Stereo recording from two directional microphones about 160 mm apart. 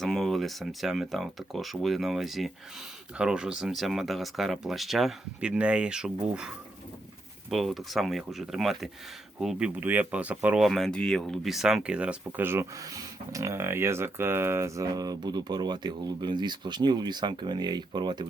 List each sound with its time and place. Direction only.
0.0 s speech: centre (ahead or behind)
7.5 s speech: centre (ahead or behind); by 18.3 s 25° right (ahead or behind)